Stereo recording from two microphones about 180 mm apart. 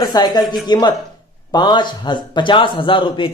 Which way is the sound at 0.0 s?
20° left (ahead or behind).